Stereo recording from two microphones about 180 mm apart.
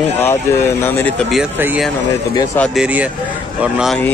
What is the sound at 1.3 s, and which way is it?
Speech, 5° right (ahead or behind).